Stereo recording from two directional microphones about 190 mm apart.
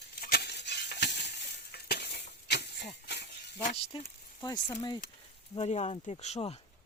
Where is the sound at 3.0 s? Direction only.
60° left (ahead or behind).